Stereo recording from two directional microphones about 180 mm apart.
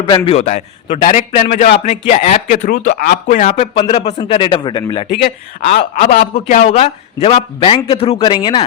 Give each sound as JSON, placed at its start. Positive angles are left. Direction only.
{"t": 0.3, "sound": "a man's voice", "side_deg": 40}
{"t": 2.6, "sound": "speech", "side_deg": 55}
{"t": 3.2, "sound": "a man's voice", "side_deg": 40}
{"t": 5.2, "sound": "a man's voice", "side_deg": 50}